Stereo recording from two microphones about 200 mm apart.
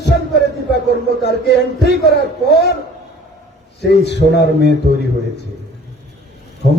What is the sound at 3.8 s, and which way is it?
Speech, 60° left (ahead or behind).